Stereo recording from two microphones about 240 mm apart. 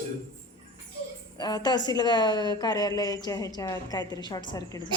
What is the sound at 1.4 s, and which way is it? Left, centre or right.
A woman's voice, centre.